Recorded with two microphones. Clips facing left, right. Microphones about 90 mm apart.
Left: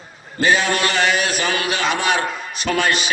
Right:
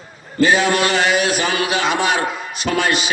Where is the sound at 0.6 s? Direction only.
15° right (ahead or behind).